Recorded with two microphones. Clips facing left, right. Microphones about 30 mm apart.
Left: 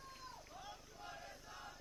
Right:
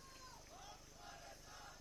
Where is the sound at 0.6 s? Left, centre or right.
Left.